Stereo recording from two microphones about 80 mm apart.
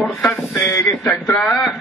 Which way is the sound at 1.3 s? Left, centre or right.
Centre.